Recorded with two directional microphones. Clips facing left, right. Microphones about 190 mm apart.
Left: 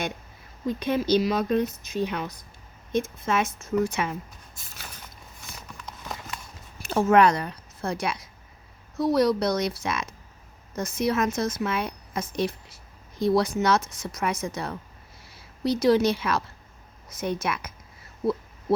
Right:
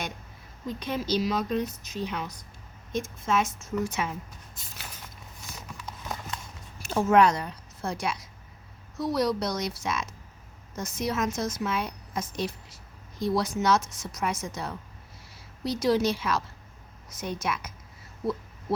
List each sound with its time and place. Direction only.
0.8 s a woman's voice: 60° left (ahead or behind)
6.8 s a woman's voice: 60° left (ahead or behind)